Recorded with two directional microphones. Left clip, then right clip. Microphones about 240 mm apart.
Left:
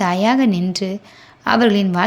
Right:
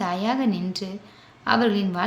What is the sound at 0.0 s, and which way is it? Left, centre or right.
A woman's voice, left.